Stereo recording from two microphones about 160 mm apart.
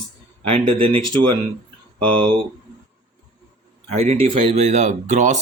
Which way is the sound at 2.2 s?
30° right (ahead or behind).